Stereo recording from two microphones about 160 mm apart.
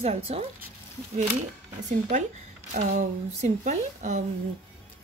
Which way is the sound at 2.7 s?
55° right (ahead or behind).